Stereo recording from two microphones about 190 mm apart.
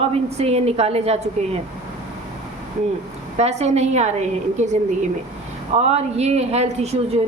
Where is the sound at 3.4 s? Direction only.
35° right (ahead or behind).